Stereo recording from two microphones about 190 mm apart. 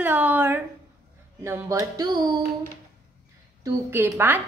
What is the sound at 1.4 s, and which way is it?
Music, 15° right (ahead or behind).